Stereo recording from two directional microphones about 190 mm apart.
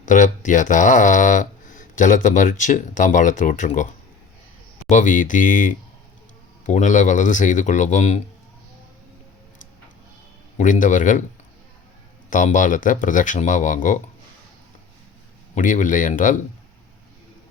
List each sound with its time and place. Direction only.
0.0 s speech: 40° left (ahead or behind)
4.9 s speech: 40° left (ahead or behind)
10.6 s speech: 40° left (ahead or behind)
12.3 s speech: 40° left (ahead or behind)
15.5 s speech: 40° left (ahead or behind)